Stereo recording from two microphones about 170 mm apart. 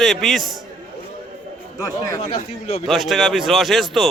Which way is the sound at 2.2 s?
40° left (ahead or behind).